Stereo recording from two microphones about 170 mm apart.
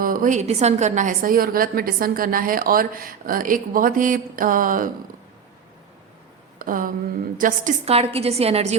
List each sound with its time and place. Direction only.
0.0 s a woman's voice: 55° right (ahead or behind)
6.6 s a woman's voice: 55° right (ahead or behind)
7.9 s a woman's voice: 35° right (ahead or behind)